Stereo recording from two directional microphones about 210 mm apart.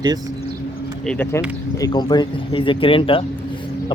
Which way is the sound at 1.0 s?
10° left (ahead or behind).